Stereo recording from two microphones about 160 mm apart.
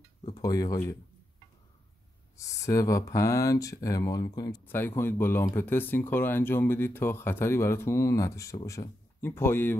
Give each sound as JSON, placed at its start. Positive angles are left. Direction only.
{"t": 0.2, "sound": "speech", "side_deg": 25}
{"t": 2.3, "sound": "speech", "side_deg": 20}
{"t": 4.6, "sound": "speech", "side_deg": 15}